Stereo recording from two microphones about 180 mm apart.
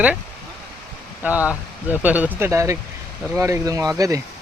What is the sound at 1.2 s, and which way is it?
Speech, 10° right (ahead or behind).